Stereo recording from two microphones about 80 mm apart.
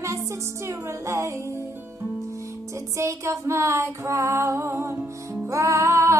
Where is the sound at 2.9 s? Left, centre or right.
Right.